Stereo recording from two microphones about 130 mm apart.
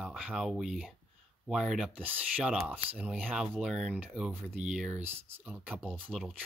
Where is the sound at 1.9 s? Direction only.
15° right (ahead or behind).